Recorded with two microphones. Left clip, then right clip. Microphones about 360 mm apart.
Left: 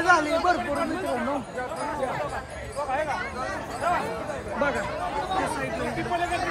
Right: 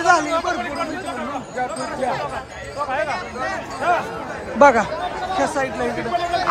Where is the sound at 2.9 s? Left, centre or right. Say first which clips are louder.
Right 4 dB; right.